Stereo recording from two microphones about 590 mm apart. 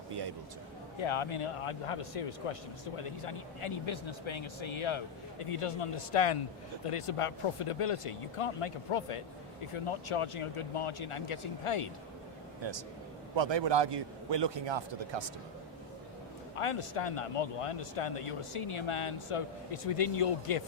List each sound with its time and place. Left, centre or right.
1.0 s a man's voice: left
12.6 s a man's voice: right
16.6 s a man's voice: left